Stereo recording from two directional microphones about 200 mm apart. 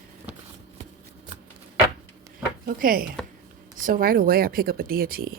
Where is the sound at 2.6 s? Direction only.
45° right (ahead or behind).